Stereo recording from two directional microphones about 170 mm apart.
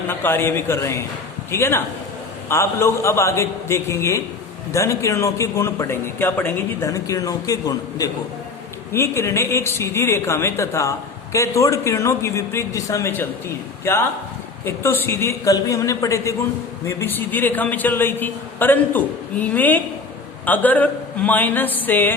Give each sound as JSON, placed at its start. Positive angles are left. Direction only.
{"t": 0.1, "sound": "a man's voice", "side_deg": 10}